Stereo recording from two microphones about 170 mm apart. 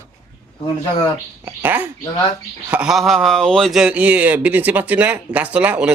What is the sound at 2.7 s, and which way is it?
Speech, 5° right (ahead or behind).